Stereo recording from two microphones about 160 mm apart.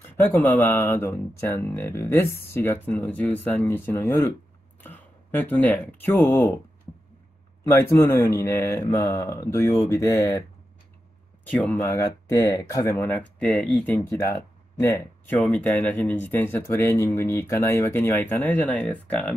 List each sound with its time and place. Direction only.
0.0 s speech: 15° left (ahead or behind)
4.7 s a sound: 10° left (ahead or behind)
7.6 s speech: 15° left (ahead or behind)
11.7 s speech: 15° left (ahead or behind)
14.2 s speech: 20° left (ahead or behind)